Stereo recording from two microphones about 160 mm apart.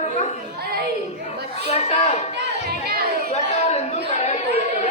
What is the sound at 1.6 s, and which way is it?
Speech, 40° left (ahead or behind).